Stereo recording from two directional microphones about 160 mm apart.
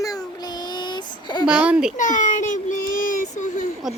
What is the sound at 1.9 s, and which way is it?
Child singing, 55° left (ahead or behind).